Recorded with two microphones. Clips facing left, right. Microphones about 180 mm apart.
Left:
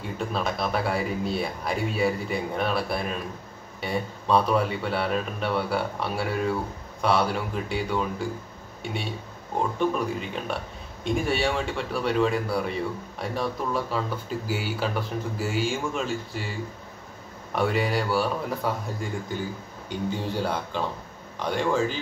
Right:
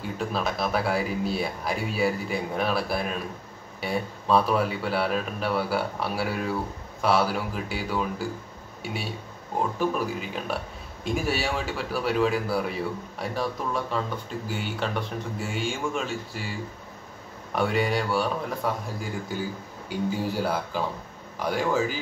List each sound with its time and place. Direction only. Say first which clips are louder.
0.0 s speech: even; centre (ahead or behind)
17.6 s speech: even; centre (ahead or behind)